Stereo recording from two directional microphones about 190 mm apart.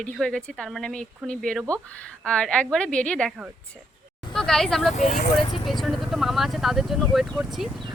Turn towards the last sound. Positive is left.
turn(degrees=0)  # may be behind; listen again after turning